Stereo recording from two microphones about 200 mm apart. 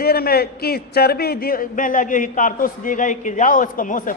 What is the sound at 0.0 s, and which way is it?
A man's voice, 50° left (ahead or behind).